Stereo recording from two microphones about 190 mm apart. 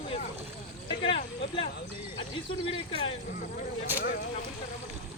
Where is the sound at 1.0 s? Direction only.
30° left (ahead or behind).